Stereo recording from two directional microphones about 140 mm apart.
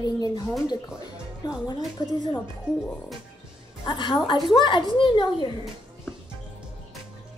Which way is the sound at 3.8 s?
35° left (ahead or behind).